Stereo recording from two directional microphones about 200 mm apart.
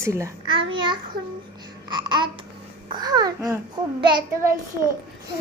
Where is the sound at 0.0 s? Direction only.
15° right (ahead or behind).